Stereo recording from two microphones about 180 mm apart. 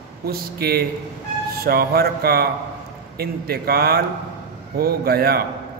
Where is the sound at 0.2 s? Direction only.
55° right (ahead or behind).